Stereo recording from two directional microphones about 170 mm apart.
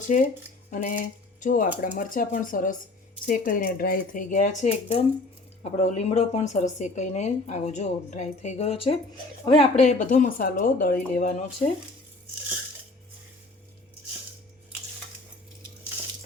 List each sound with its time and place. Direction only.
0.1 s speech: 45° left (ahead or behind)
0.7 s cutlery: 50° left (ahead or behind)
1.4 s a woman's voice: 50° left (ahead or behind)